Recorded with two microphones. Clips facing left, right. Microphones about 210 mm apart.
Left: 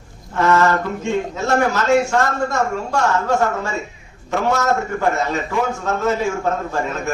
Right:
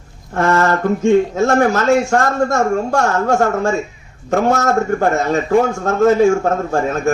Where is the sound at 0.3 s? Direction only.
50° right (ahead or behind).